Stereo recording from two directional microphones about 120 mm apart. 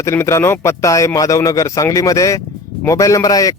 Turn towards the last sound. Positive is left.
turn(degrees=30)  # may be behind; listen again after turning